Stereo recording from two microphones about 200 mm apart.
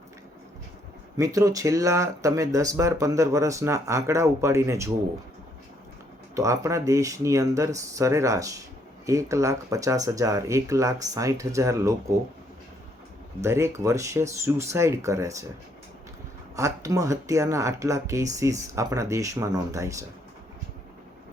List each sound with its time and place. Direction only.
1.1 s speech: 15° right (ahead or behind)
6.3 s speech: 15° right (ahead or behind)
13.4 s speech: 15° right (ahead or behind)
16.6 s speech: 15° right (ahead or behind)